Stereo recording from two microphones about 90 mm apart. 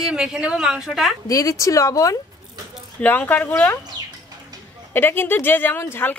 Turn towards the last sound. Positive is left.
turn(degrees=25)  # may be behind; listen again after turning